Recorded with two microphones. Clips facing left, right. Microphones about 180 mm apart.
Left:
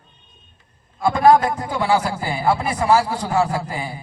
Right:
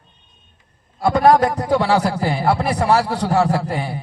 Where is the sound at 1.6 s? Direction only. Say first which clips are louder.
Right 3 dB; 65° right (ahead or behind).